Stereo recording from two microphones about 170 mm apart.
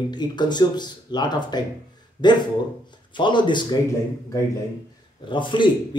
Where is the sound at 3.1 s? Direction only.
30° left (ahead or behind).